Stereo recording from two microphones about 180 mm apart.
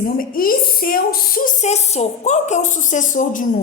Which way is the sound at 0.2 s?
55° left (ahead or behind).